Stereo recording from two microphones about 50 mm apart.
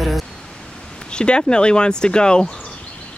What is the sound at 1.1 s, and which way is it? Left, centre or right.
Speech, centre.